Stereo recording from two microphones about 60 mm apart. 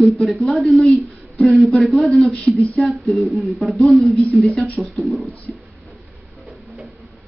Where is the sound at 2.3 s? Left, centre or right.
Left.